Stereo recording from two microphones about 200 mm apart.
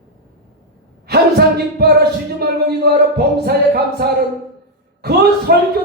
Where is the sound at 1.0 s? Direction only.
55° right (ahead or behind).